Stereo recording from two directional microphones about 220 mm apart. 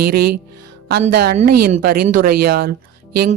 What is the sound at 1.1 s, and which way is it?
Speech, 45° right (ahead or behind).